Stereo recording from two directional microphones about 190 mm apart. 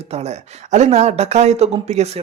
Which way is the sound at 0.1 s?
35° right (ahead or behind).